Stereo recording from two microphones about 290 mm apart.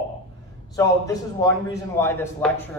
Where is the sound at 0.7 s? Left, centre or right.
Centre.